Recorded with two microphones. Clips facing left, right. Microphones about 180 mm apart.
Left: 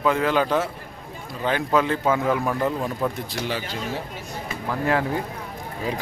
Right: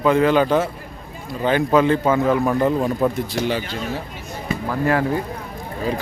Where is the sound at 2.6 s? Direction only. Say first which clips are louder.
Right 6 dB; 20° right (ahead or behind).